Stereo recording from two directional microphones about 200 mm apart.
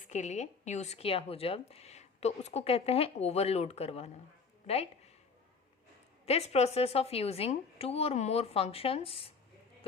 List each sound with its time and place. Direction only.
0.1 s speech: 35° left (ahead or behind)
6.2 s speech: 30° left (ahead or behind)